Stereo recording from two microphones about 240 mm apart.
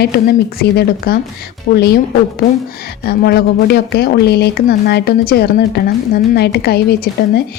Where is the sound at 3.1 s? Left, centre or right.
Left.